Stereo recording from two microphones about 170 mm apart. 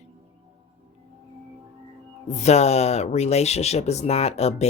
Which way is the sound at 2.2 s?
40° left (ahead or behind).